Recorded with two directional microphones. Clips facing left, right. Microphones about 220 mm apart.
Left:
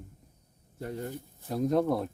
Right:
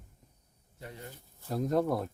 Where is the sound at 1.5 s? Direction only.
Centre (ahead or behind).